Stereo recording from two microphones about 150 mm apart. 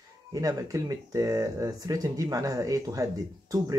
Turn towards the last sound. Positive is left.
turn(degrees=-20)  # may be behind; listen again after turning